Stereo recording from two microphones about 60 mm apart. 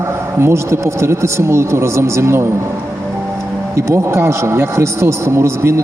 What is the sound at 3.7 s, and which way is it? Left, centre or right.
Speech, right.